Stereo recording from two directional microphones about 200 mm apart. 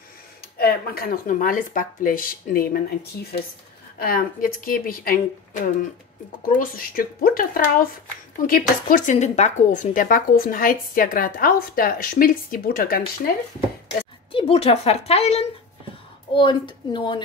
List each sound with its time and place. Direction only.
0.6 s speech: 50° left (ahead or behind)
4.0 s speech: 50° left (ahead or behind)
14.3 s speech: 30° left (ahead or behind)